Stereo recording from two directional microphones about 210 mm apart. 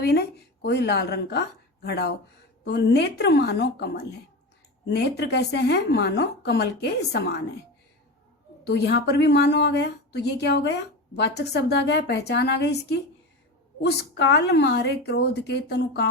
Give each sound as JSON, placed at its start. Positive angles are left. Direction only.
{"t": 0.0, "sound": "a woman's voice", "side_deg": 50}
{"t": 8.6, "sound": "a woman's voice", "side_deg": 55}
{"t": 14.3, "sound": "a woman's voice", "side_deg": 55}